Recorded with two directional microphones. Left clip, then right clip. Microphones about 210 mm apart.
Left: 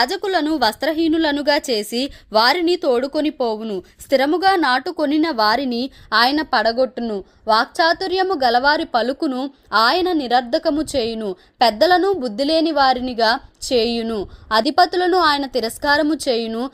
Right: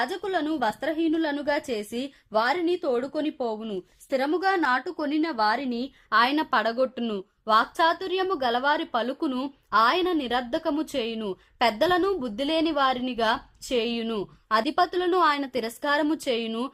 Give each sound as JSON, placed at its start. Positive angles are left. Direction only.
{"t": 0.0, "sound": "a woman's voice", "side_deg": 30}
{"t": 6.1, "sound": "a woman's voice", "side_deg": 25}